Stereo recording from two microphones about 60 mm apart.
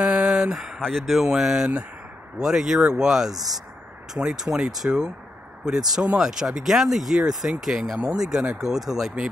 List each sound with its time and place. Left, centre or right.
0.0 s a sound: centre
0.7 s speech: centre
3.3 s speech: right
4.2 s speech: centre